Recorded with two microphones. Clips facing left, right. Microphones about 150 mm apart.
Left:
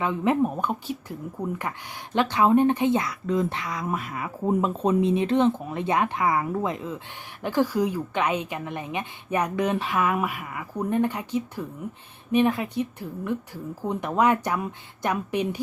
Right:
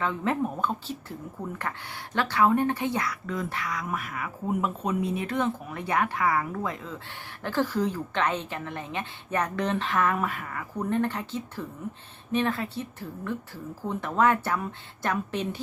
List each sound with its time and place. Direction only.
0.0 s a woman's voice: 15° left (ahead or behind)